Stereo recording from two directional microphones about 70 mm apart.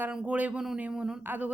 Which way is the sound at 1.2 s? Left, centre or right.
Right.